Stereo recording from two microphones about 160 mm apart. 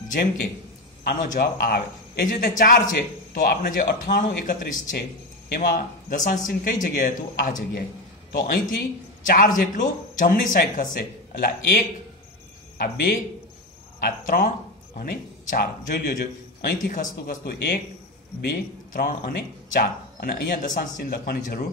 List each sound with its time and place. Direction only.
1.0 s a man's voice: 60° left (ahead or behind)
18.5 s a man's voice: 65° left (ahead or behind)